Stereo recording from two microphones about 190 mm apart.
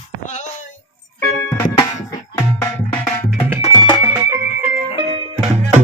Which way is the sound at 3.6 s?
25° left (ahead or behind).